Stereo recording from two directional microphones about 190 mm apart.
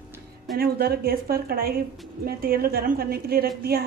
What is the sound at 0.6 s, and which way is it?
A woman's voice, 55° right (ahead or behind).